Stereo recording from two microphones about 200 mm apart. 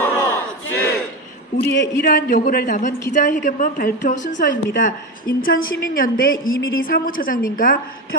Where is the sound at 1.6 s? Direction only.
55° left (ahead or behind).